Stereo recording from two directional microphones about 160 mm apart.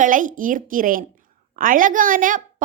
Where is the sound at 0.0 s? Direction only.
55° right (ahead or behind).